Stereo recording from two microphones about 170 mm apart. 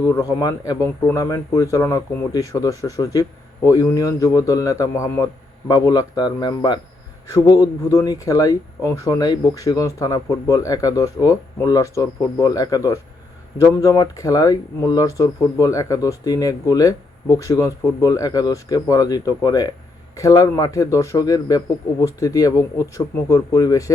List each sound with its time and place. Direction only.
0.1 s speech: 20° left (ahead or behind)